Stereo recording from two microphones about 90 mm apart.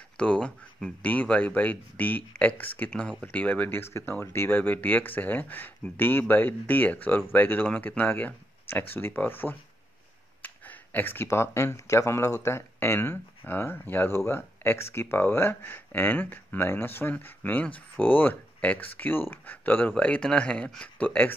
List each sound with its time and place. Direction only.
0.2 s speech: 15° left (ahead or behind)